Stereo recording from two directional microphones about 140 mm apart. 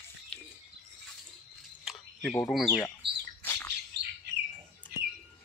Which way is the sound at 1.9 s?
5° right (ahead or behind).